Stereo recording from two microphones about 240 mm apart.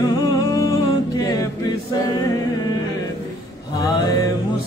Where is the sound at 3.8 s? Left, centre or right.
Centre.